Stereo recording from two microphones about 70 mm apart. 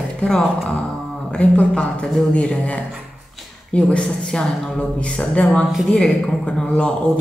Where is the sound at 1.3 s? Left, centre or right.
Centre.